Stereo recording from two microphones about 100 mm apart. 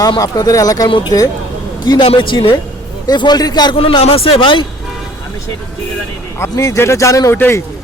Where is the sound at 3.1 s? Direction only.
45° left (ahead or behind).